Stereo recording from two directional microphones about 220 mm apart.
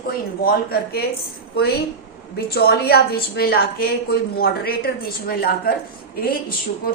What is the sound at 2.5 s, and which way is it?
A woman's voice, 45° left (ahead or behind).